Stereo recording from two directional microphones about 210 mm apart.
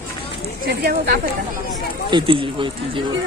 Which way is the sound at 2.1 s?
25° right (ahead or behind).